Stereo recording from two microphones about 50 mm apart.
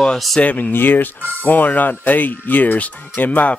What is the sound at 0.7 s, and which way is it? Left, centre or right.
Speech, left.